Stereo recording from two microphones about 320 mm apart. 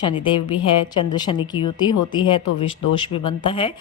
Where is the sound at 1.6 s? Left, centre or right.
Left.